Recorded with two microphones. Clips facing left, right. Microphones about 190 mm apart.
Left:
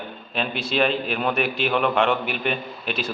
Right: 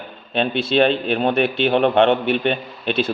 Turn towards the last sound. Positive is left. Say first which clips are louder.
# right 6 dB
turn(degrees=-30)  # may be behind; listen again after turning